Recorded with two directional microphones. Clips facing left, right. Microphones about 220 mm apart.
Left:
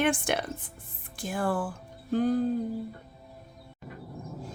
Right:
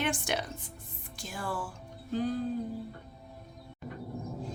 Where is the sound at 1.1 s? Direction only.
55° left (ahead or behind).